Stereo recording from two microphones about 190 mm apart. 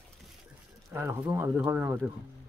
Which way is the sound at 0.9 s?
10° right (ahead or behind).